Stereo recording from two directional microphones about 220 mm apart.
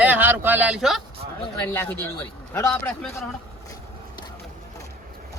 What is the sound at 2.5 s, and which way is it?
Snicker, 10° left (ahead or behind).